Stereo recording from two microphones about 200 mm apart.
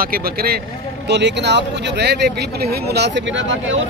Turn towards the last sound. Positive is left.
turn(degrees=-65)  # may be behind; listen again after turning